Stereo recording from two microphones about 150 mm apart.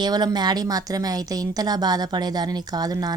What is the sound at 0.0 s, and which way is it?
A woman's voice, 25° right (ahead or behind).